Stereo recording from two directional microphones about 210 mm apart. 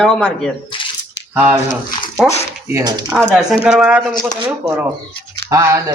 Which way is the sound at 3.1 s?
Centre (ahead or behind).